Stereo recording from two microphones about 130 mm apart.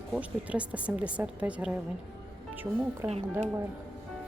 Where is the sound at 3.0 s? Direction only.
15° right (ahead or behind).